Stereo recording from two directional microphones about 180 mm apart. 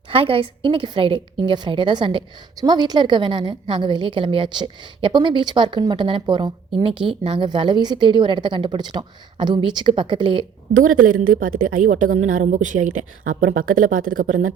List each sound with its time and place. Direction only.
0.1 s a woman's voice: 30° right (ahead or behind)
10.8 s a woman's voice: 50° right (ahead or behind)